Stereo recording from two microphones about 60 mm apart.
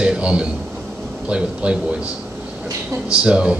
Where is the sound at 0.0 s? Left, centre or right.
Centre.